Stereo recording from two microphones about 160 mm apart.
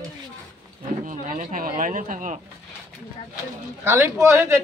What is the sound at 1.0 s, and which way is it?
Speech, 55° right (ahead or behind).